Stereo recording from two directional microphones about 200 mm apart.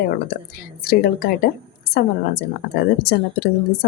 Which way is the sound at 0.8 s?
50° left (ahead or behind).